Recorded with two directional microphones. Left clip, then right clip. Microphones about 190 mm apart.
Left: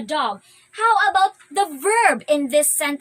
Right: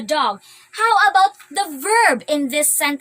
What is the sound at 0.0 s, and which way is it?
A woman's voice, 10° left (ahead or behind).